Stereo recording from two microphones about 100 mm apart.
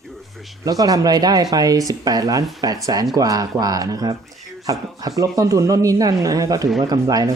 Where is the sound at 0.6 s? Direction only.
40° right (ahead or behind).